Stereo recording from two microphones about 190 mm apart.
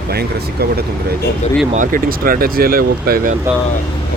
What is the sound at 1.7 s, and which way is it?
Speech, 45° right (ahead or behind).